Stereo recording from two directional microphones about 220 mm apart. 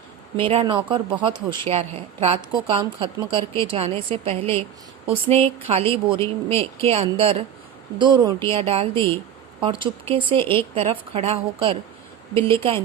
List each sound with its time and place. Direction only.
0.3 s speech: 25° right (ahead or behind)